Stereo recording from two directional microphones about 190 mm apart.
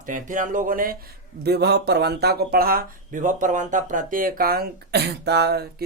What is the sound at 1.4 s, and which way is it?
Speech, 60° right (ahead or behind).